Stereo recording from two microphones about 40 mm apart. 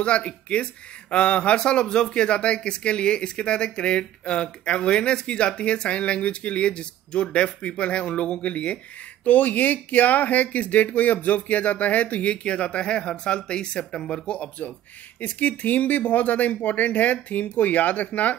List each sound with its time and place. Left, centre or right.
0.0 s speech: left
9.2 s speech: left
15.1 s speech: left